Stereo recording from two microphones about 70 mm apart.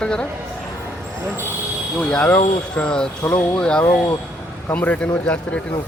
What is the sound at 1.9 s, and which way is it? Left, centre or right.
A man's voice, centre.